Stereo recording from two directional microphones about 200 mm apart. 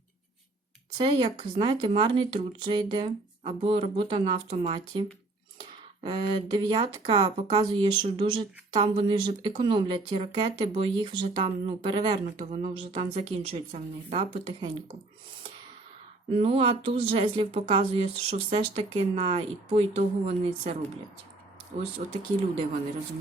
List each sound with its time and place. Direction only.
0.9 s speech: 25° right (ahead or behind)
12.5 s speech: 30° right (ahead or behind)
16.3 s speech: 30° right (ahead or behind)
22.0 s speech: 40° right (ahead or behind)